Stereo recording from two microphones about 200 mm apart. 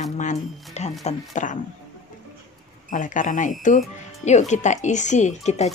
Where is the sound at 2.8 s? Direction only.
40° left (ahead or behind).